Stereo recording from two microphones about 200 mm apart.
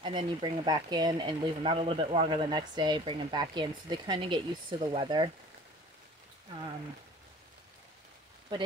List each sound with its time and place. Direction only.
0.0 s speech: 25° right (ahead or behind)